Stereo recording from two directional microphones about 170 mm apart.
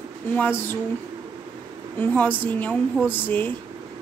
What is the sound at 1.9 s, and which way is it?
A woman's voice, 10° left (ahead or behind).